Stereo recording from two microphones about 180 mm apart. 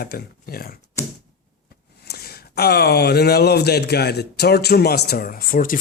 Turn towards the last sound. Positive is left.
turn(degrees=50)  # may be behind; listen again after turning